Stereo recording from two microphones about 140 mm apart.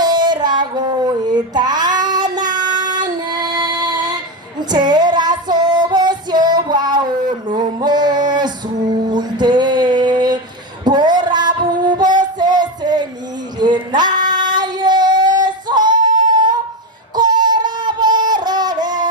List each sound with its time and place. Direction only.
0.0 s child singing: 30° right (ahead or behind)
4.7 s female singing: 30° right (ahead or behind)
10.8 s music: 30° right (ahead or behind)
13.6 s child singing: 30° right (ahead or behind)
17.2 s a sound: 30° right (ahead or behind)